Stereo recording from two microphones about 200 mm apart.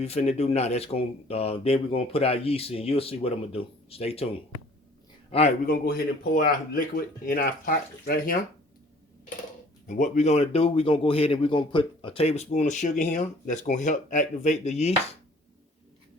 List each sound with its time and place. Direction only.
0.0 s speech: 30° left (ahead or behind)
5.6 s speech: 50° left (ahead or behind)
9.8 s a man's voice: 40° left (ahead or behind)